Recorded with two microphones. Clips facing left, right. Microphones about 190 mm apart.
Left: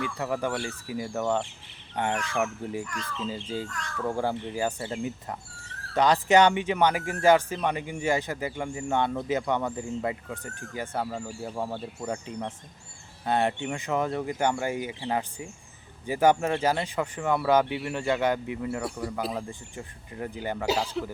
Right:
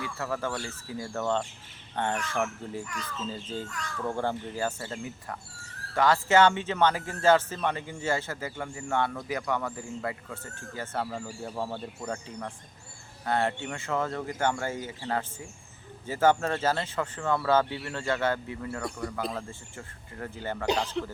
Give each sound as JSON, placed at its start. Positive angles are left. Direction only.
{"t": 0.0, "sound": "speech", "side_deg": 15}
{"t": 2.8, "sound": "speech", "side_deg": -5}
{"t": 3.4, "sound": "speech", "side_deg": 10}
{"t": 18.8, "sound": "speech", "side_deg": 5}
{"t": 19.5, "sound": "speech", "side_deg": 15}
{"t": 20.7, "sound": "speech", "side_deg": 5}